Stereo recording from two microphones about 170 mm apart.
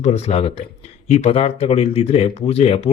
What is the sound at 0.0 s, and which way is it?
A man's voice, 40° left (ahead or behind).